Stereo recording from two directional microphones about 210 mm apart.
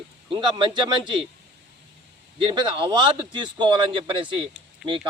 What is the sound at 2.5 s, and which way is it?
Speech, 25° right (ahead or behind).